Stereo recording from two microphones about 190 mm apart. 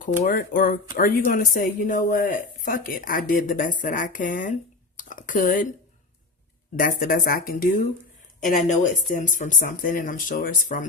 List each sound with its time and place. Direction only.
0.3 s speech: 45° left (ahead or behind)
4.9 s a sound: 45° left (ahead or behind)
6.7 s speech: 45° left (ahead or behind)